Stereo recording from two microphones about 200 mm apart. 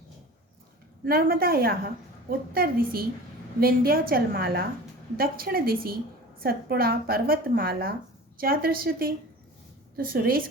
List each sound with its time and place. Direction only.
1.0 s a woman's voice: 50° right (ahead or behind)